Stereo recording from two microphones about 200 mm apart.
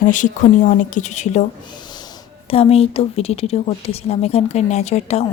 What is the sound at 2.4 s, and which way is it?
A woman's voice, 30° left (ahead or behind).